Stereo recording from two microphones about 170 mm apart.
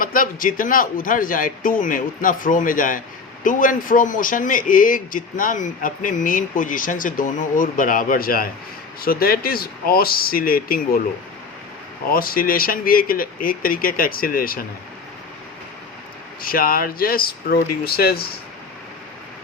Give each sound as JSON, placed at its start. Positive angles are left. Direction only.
{"t": 0.0, "sound": "speech", "side_deg": 55}
{"t": 12.1, "sound": "speech", "side_deg": 60}
{"t": 16.4, "sound": "speech", "side_deg": 60}